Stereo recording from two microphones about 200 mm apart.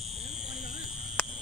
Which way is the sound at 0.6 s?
35° right (ahead or behind).